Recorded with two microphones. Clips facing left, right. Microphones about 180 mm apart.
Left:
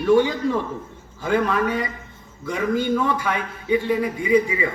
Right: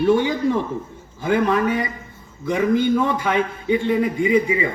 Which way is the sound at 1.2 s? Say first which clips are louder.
Right 2 dB; 20° right (ahead or behind).